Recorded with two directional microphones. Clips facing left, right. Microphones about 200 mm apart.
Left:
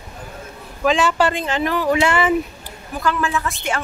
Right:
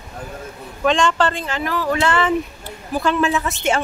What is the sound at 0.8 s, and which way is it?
Speech, 5° left (ahead or behind).